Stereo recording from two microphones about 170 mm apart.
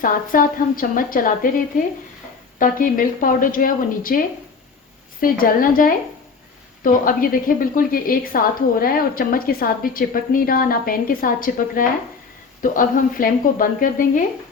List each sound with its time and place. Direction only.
0.0 s a woman's voice: 55° left (ahead or behind)
2.6 s a woman's voice: 55° left (ahead or behind)
5.2 s a woman's voice: 55° left (ahead or behind)